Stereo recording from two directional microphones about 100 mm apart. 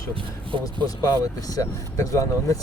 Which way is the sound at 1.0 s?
30° left (ahead or behind).